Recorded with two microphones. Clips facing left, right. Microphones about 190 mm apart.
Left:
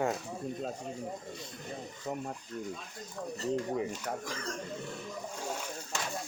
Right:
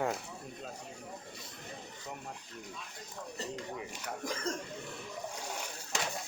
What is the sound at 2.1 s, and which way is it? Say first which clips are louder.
Speech: left 9 dB; 40° left (ahead or behind).